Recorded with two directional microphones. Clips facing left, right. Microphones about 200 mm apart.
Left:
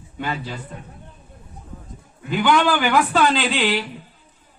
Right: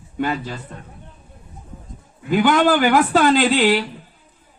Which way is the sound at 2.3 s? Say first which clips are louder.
Right 3 dB; 45° right (ahead or behind).